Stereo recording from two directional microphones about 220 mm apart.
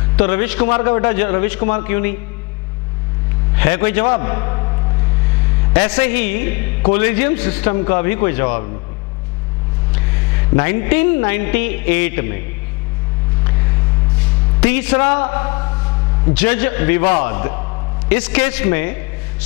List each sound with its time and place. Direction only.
0.1 s a man's voice: 10° left (ahead or behind)
3.5 s a man's voice: 10° left (ahead or behind)
5.7 s a man's voice: 10° left (ahead or behind)
9.9 s speech: 15° left (ahead or behind)
13.4 s a sound: 15° left (ahead or behind)
14.6 s a man's voice: 10° left (ahead or behind)